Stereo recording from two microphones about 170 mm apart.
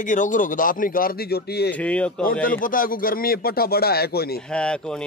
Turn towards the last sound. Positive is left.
turn(degrees=5)  # may be behind; listen again after turning